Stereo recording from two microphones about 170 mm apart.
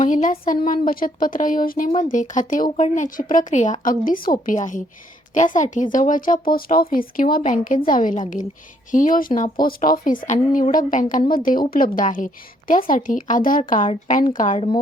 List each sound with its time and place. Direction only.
0.0 s speech: 50° left (ahead or behind)
14.5 s speech: 35° left (ahead or behind)